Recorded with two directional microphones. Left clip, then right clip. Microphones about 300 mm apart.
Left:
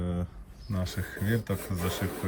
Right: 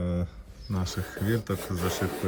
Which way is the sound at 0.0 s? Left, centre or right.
Centre.